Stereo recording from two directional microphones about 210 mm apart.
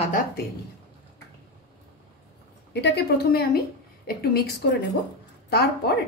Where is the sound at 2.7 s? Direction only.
50° left (ahead or behind).